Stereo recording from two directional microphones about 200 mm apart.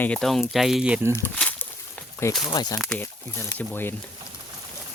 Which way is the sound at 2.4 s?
20° left (ahead or behind).